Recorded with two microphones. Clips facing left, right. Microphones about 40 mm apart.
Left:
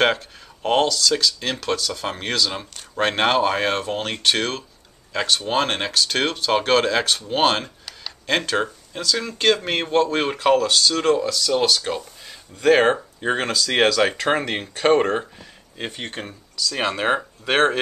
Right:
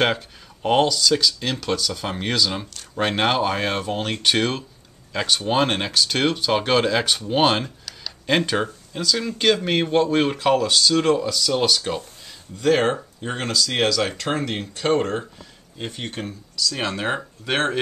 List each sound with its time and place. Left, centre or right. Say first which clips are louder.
0.0 s speech: left 2 dB; centre
7.6 s a sound: right 1 dB; centre
8.3 s speech: right 1 dB; centre
12.5 s speech: left 3 dB; centre